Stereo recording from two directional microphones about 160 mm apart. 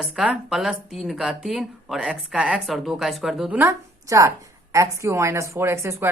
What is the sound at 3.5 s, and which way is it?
A woman's voice, 20° right (ahead or behind).